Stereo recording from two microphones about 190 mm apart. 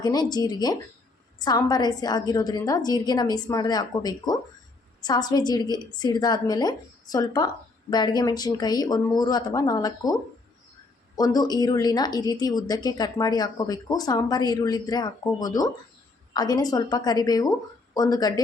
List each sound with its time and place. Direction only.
0.0 s a woman's voice: 20° left (ahead or behind)
11.2 s a woman's voice: 20° left (ahead or behind)